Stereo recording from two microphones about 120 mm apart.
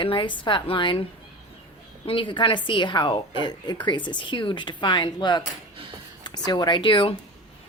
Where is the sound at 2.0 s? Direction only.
45° left (ahead or behind).